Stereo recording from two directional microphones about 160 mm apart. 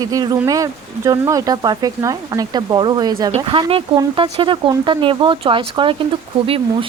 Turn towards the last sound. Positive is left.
turn(degrees=-35)  # may be behind; listen again after turning